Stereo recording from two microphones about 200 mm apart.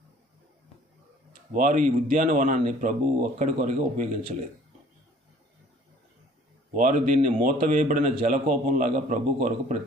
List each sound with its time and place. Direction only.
1.5 s speech: 40° right (ahead or behind)
4.2 s speech: 30° right (ahead or behind)
6.7 s speech: 40° right (ahead or behind)